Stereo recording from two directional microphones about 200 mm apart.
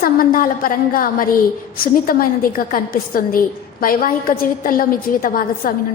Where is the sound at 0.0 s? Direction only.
45° left (ahead or behind).